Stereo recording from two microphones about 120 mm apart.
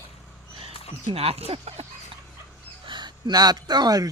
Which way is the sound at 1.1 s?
60° right (ahead or behind).